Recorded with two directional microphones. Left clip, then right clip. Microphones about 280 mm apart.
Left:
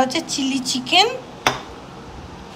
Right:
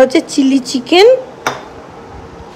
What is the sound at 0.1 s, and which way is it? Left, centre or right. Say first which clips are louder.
Speech: right 10 dB; centre.